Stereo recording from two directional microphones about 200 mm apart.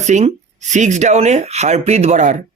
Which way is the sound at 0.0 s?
35° right (ahead or behind).